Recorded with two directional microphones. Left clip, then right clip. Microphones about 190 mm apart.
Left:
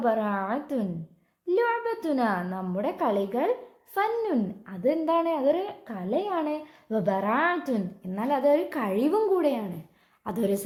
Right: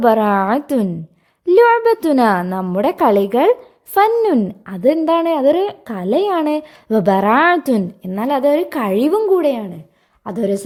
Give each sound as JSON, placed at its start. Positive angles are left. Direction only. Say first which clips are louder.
{"t": 0.0, "sound": "a woman's voice", "louder": "right 13 dB", "side_deg": -60}
{"t": 10.2, "sound": "a woman's voice", "louder": "right 8 dB", "side_deg": -25}